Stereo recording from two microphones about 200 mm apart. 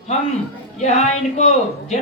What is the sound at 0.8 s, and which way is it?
Speech, 35° left (ahead or behind).